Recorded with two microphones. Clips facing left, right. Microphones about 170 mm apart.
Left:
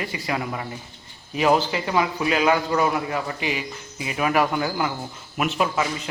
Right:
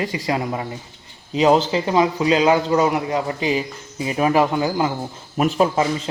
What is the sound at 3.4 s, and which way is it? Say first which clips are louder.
Speech: right 6 dB; 35° right (ahead or behind).